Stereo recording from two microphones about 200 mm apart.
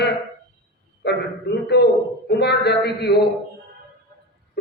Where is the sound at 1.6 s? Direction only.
55° left (ahead or behind).